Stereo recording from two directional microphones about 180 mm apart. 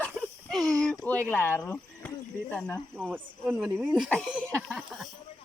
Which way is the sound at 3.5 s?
5° right (ahead or behind).